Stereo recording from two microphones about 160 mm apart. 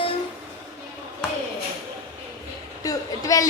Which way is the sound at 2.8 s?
20° left (ahead or behind).